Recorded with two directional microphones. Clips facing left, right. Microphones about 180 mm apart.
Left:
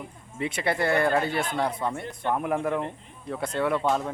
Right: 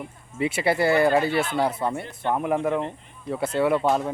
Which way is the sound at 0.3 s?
5° right (ahead or behind).